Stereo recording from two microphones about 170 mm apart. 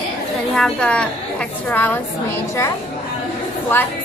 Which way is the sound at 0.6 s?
5° left (ahead or behind).